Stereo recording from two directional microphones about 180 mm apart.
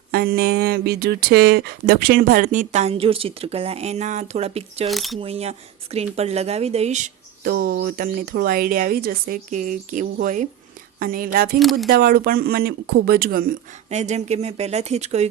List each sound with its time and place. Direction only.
0.1 s speech: 60° right (ahead or behind); by 4.9 s 35° right (ahead or behind)
4.9 s speech: centre (ahead or behind)
5.2 s speech: 35° right (ahead or behind)
7.4 s speech: 55° right (ahead or behind)
11.6 s speech: centre (ahead or behind)
11.9 s speech: 55° right (ahead or behind); by 15.3 s 35° right (ahead or behind)